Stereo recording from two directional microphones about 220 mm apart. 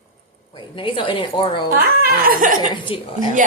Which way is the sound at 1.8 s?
40° right (ahead or behind).